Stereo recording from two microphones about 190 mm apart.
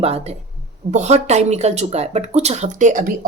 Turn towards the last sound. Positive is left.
turn(degrees=-45)  # may be behind; listen again after turning